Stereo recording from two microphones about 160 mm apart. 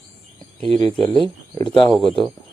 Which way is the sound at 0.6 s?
35° right (ahead or behind).